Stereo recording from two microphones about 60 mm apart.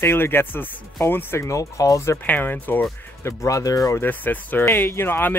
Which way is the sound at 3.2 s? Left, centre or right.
Left.